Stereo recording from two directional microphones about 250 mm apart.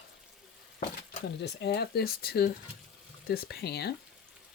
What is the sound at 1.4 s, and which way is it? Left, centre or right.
Speech, left.